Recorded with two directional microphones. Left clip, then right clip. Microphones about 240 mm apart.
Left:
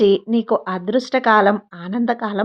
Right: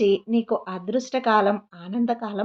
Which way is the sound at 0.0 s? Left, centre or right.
Left.